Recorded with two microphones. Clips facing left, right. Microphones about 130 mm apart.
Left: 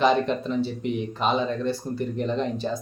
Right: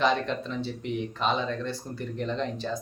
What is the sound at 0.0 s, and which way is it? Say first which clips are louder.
Speech: left 5 dB; 5° left (ahead or behind).